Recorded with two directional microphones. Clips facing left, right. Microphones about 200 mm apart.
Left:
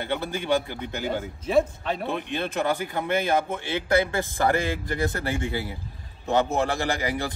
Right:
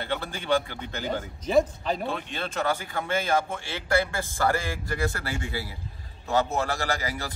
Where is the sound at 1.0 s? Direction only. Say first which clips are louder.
Left 1 dB; 5° left (ahead or behind).